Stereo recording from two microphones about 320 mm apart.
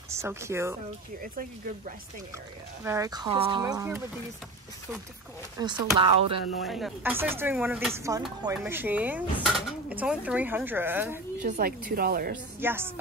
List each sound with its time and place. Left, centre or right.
0.1 s speech: centre
2.8 s speech: centre
5.6 s speech: centre
6.6 s speech: centre
11.4 s a woman's voice: right
12.5 s speech: centre